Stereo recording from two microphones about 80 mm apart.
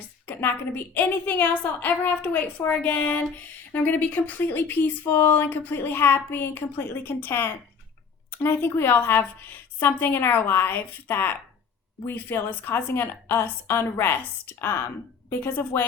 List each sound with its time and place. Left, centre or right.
0.3 s speech: left